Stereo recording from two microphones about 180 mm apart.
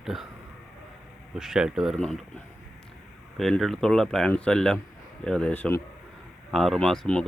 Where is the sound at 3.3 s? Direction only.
Centre (ahead or behind).